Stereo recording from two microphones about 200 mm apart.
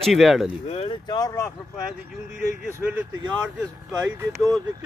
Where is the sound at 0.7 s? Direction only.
25° left (ahead or behind).